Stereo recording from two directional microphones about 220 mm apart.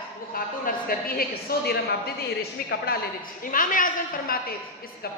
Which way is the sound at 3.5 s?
40° left (ahead or behind).